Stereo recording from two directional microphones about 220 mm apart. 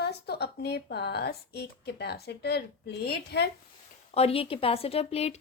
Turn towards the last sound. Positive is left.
turn(degrees=30)  # may be behind; listen again after turning